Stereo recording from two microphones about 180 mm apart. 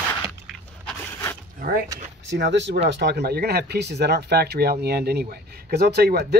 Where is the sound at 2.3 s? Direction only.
75° right (ahead or behind).